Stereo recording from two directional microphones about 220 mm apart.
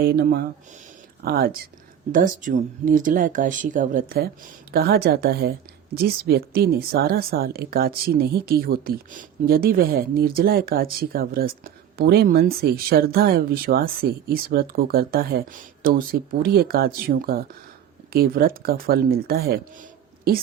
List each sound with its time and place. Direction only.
0.0 s a woman's voice: 45° right (ahead or behind)